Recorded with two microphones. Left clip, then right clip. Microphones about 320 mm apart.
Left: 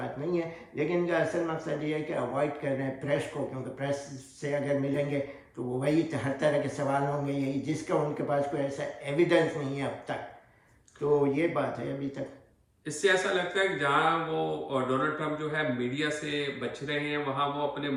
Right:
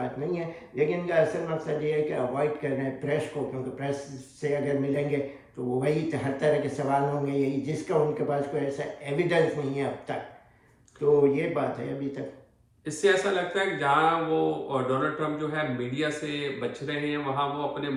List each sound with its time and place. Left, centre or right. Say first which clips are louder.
0.0 s a man's voice: right 1 dB; centre
11.2 s a man's voice: right 4 dB; centre
12.8 s a man's voice: right 2 dB; centre